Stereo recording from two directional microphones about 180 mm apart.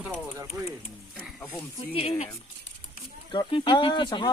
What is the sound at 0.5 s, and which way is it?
Speech, 20° right (ahead or behind).